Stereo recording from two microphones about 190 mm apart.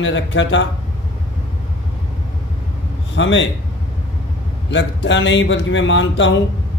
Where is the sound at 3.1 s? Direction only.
75° left (ahead or behind).